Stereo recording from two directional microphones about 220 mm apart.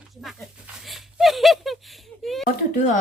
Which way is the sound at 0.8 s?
Centre (ahead or behind).